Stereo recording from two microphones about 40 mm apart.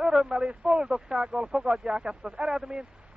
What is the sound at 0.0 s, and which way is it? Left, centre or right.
Radio, centre.